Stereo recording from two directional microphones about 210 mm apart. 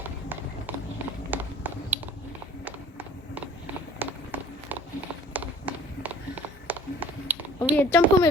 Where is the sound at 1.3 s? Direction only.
10° right (ahead or behind).